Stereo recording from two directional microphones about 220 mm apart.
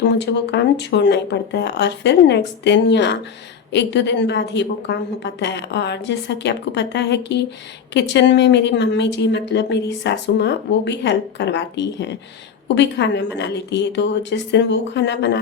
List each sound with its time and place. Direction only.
0.0 s speech: 50° left (ahead or behind)